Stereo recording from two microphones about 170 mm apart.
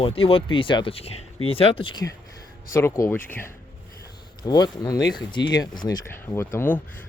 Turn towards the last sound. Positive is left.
turn(degrees=10)  # may be behind; listen again after turning